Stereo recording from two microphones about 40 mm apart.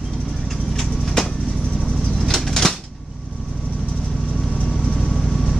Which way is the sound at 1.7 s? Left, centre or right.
Left.